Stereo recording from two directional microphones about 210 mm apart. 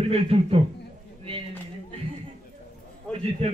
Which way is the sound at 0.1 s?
30° right (ahead or behind).